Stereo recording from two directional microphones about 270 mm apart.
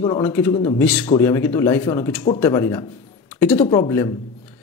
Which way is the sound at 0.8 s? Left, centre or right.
Centre.